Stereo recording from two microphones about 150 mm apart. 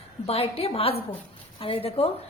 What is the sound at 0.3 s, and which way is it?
A woman's voice, 40° left (ahead or behind).